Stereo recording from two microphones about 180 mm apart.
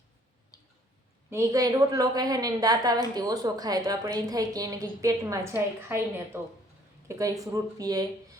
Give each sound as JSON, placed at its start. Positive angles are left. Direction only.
{"t": 0.5, "sound": "tick-tock", "side_deg": 20}
{"t": 1.3, "sound": "a woman's voice", "side_deg": -15}